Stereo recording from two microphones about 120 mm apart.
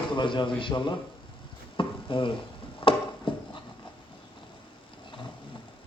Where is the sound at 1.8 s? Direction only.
45° left (ahead or behind).